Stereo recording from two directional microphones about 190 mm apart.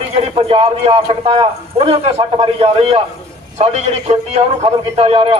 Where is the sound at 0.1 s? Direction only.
30° right (ahead or behind).